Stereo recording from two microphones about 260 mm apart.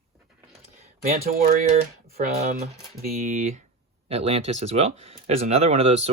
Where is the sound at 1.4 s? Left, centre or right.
Right.